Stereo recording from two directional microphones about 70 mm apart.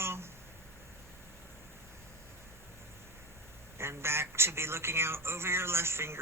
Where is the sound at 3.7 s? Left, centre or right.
Right.